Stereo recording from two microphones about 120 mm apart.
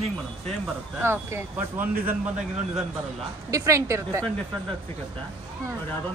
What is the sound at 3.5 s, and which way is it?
Speech, 25° right (ahead or behind).